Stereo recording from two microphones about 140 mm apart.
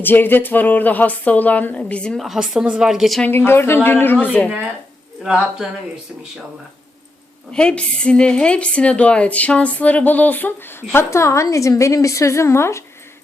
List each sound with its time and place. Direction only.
0.0 s a woman's voice: 15° left (ahead or behind)
3.2 s a woman's voice: 15° left (ahead or behind)
4.4 s speech: 10° right (ahead or behind)
7.5 s a woman's voice: 5° left (ahead or behind)